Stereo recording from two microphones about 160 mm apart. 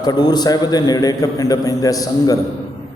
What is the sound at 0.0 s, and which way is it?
A man's voice, 25° left (ahead or behind).